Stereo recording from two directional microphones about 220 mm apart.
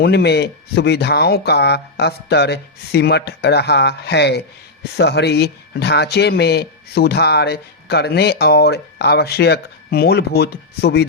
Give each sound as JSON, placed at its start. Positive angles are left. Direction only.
{"t": 0.0, "sound": "speech", "side_deg": 50}